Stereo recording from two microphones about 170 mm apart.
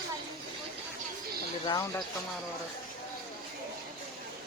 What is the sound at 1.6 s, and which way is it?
Speech, 20° left (ahead or behind).